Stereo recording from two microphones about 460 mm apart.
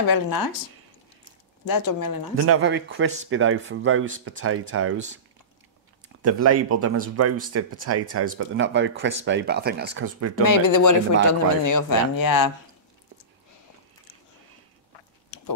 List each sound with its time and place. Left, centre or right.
0.1 s speech: left
1.7 s speech: left
2.3 s speech: right
6.2 s speech: right
10.4 s speech: left